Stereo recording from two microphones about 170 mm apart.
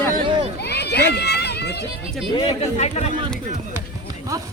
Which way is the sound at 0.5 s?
75° left (ahead or behind).